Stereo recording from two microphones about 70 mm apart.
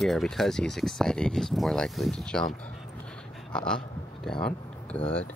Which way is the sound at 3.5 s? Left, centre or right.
Centre.